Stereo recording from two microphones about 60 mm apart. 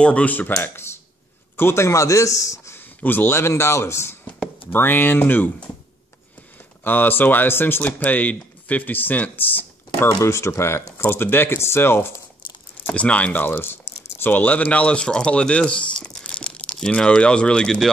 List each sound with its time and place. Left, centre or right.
0.0 s speech: left
0.7 s speech: left
3.0 s speech: left
6.8 s speech: left
10.0 s speech: left
12.9 s speech: left
13.5 s speech: left
15.0 s speech: centre